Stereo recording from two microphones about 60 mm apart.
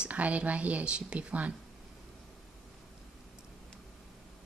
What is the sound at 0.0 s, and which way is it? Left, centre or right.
Speech, right.